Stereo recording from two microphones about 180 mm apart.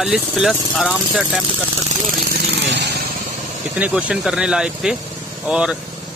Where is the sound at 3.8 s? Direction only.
5° right (ahead or behind).